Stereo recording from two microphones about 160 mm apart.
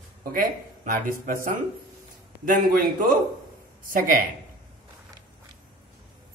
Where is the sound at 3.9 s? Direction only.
60° right (ahead or behind).